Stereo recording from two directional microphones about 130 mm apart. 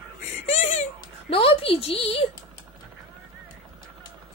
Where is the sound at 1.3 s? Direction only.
45° left (ahead or behind).